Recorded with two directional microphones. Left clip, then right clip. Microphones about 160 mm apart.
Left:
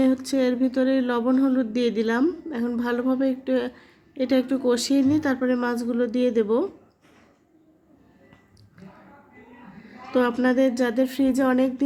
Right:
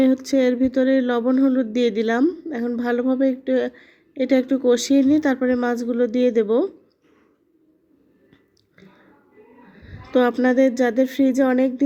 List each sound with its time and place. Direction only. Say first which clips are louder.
0.0 s a woman's voice: right 4 dB; 15° right (ahead or behind)
10.1 s a woman's voice: right 4 dB; 20° right (ahead or behind)